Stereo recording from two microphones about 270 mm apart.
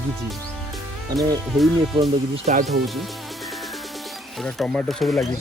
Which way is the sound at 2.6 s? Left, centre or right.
Centre.